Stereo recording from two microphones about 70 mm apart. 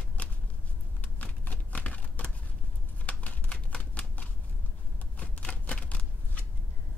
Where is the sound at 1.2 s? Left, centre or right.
Centre.